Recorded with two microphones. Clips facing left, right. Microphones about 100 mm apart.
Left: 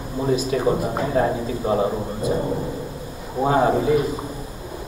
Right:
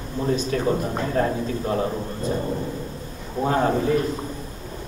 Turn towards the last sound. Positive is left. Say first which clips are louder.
# left 2 dB
turn(degrees=5)  # may be behind; listen again after turning